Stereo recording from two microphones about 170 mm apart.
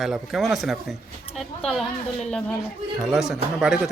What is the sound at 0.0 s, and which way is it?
Speech, centre (ahead or behind).